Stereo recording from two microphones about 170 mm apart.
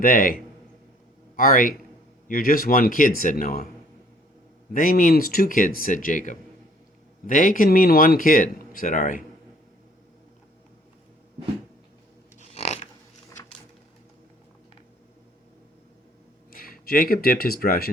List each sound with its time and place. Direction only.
0.0 s speech: 55° left (ahead or behind)
1.4 s speech: 55° left (ahead or behind)
4.7 s speech: 55° left (ahead or behind)
12.4 s a sound: 40° left (ahead or behind)
16.5 s speech: 55° left (ahead or behind)